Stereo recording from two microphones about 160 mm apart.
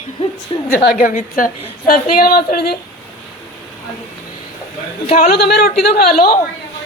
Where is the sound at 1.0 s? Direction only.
60° left (ahead or behind).